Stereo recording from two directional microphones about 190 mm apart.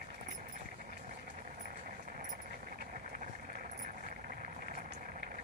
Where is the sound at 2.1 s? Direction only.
50° right (ahead or behind).